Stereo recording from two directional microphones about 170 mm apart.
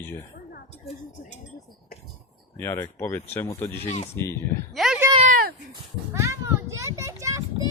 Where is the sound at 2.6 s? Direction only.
15° left (ahead or behind).